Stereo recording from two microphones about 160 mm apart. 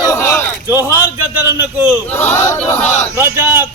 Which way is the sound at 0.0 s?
20° left (ahead or behind).